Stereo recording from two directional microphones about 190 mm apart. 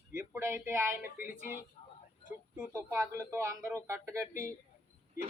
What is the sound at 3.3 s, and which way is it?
Speech, 15° right (ahead or behind).